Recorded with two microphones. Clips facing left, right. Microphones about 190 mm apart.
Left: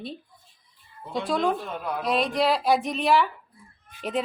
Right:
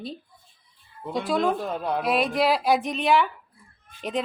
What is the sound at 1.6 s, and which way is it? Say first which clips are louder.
Speech: right 4 dB; 30° right (ahead or behind).